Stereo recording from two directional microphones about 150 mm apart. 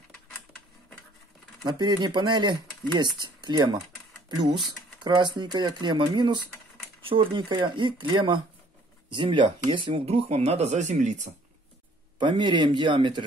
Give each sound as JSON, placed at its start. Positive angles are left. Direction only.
{"t": 1.6, "sound": "speech", "side_deg": -30}
{"t": 12.2, "sound": "speech", "side_deg": -30}